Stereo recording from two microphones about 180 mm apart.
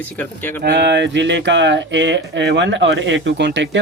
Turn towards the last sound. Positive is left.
turn(degrees=-85)